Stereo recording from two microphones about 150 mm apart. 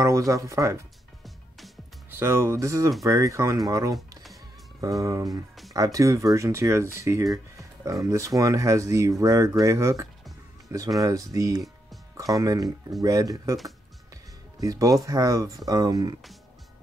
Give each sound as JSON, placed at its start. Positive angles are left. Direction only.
{"t": 0.0, "sound": "speech", "side_deg": -20}
{"t": 2.0, "sound": "speech", "side_deg": -15}
{"t": 14.6, "sound": "speech", "side_deg": -20}